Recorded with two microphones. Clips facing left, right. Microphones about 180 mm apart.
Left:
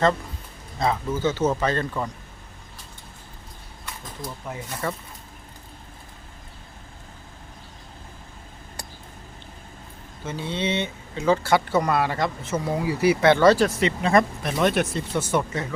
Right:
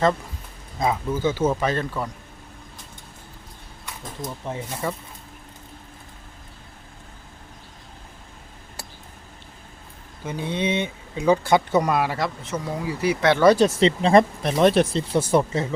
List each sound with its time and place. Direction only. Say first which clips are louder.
0.8 s speech: right 1 dB; 10° right (ahead or behind)
4.2 s speech: right 4 dB; 25° right (ahead or behind)
10.2 s speech: right 2 dB; 15° right (ahead or behind)
12.5 s speech: left 3 dB; 5° left (ahead or behind)
13.3 s speech: right 4 dB; 10° right (ahead or behind)
13.7 s speech: right 4 dB; 30° right (ahead or behind)